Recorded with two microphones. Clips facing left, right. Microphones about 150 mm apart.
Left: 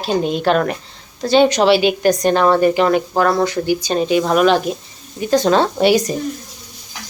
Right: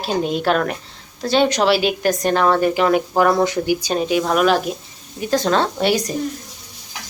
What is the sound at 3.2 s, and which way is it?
A woman's voice, 15° right (ahead or behind).